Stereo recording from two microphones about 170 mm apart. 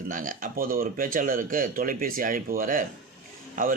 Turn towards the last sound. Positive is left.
turn(degrees=-55)  # may be behind; listen again after turning